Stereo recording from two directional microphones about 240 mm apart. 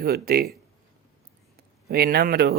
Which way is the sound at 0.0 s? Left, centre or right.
Right.